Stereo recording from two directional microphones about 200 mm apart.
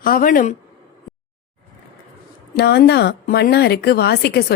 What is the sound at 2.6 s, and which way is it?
Speech, 55° left (ahead or behind).